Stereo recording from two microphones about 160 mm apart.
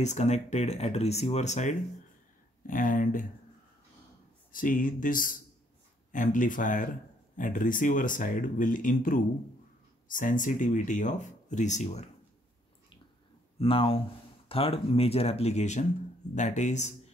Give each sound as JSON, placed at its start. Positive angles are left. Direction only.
{"t": 0.0, "sound": "speech", "side_deg": 45}
{"t": 2.6, "sound": "speech", "side_deg": 55}
{"t": 4.5, "sound": "speech", "side_deg": 60}
{"t": 13.6, "sound": "speech", "side_deg": 35}